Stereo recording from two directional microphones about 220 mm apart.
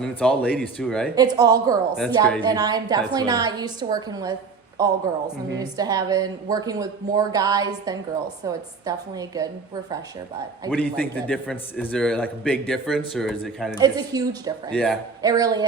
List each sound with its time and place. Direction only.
0.0 s speech: 5° left (ahead or behind)
1.1 s speech: 15° right (ahead or behind)
1.9 s speech: centre (ahead or behind)
2.4 s speech: 15° right (ahead or behind)
5.5 s speech: 15° right (ahead or behind)
10.8 s a man's voice: 5° left (ahead or behind)
13.7 s speech: 15° right (ahead or behind)
14.7 s speech: 5° left (ahead or behind)
15.2 s speech: 15° right (ahead or behind)